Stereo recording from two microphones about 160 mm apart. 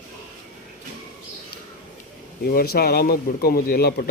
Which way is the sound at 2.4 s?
70° left (ahead or behind).